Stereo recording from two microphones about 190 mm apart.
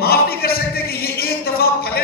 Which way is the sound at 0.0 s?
55° left (ahead or behind).